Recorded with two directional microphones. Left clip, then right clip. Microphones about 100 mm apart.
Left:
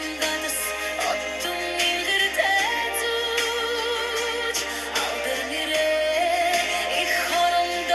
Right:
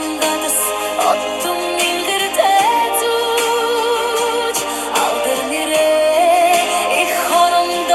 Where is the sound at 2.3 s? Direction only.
45° right (ahead or behind).